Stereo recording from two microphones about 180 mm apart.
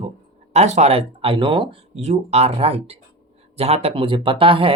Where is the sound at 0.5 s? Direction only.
40° right (ahead or behind).